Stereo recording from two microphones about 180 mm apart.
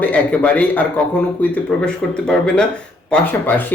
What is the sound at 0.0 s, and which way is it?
Speech, 5° left (ahead or behind).